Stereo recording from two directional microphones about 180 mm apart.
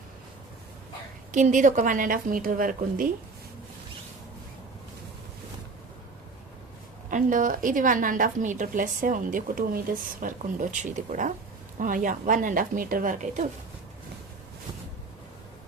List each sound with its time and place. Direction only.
1.3 s a woman's voice: 45° right (ahead or behind)
7.1 s a woman's voice: 45° right (ahead or behind)